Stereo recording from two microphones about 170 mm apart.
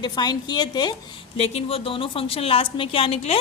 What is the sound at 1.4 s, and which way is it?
A woman's voice, 35° left (ahead or behind).